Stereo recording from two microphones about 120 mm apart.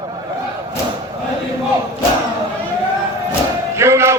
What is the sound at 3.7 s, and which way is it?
Music, 20° right (ahead or behind).